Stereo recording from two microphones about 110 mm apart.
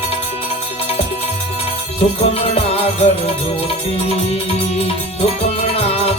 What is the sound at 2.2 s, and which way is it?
Music, 65° left (ahead or behind).